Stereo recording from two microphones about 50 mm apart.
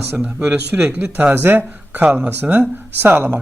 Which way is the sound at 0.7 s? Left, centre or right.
Right.